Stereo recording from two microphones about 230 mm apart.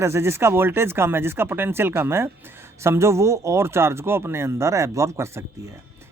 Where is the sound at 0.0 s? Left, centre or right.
Centre.